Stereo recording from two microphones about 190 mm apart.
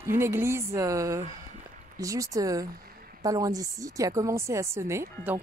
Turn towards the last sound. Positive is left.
turn(degrees=-15)  # may be behind; listen again after turning